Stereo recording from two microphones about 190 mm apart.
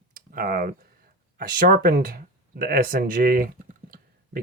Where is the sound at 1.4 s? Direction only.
50° right (ahead or behind).